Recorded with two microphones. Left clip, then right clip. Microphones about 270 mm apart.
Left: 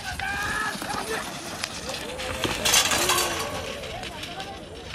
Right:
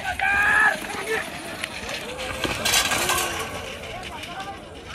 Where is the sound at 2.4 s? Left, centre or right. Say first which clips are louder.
Even; centre.